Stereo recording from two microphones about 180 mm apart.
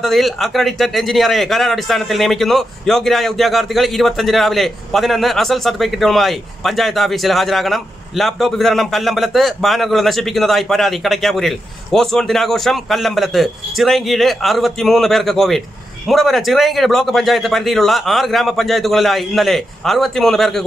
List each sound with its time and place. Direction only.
0.0 s speech: centre (ahead or behind)